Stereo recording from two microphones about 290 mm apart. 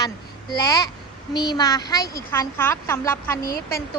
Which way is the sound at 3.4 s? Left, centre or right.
Left.